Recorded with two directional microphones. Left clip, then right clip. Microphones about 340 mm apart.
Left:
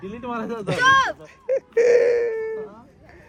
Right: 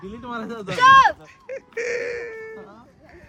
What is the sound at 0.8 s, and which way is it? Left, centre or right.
Speech, right.